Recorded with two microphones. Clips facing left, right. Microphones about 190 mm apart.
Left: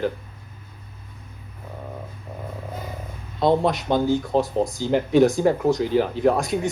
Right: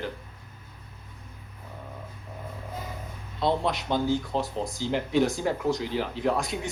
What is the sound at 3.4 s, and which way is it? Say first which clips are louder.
Speech: left 7 dB; 45° left (ahead or behind).